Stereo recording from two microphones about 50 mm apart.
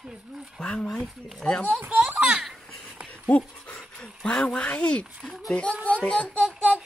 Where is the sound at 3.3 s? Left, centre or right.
Left.